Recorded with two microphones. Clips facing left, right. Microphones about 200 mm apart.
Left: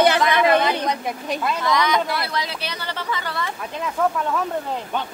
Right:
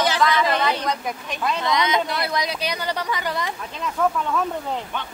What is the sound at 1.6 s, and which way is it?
Speech, 20° right (ahead or behind).